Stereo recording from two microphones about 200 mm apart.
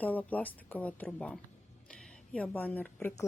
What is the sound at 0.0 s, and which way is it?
Speech, 10° left (ahead or behind).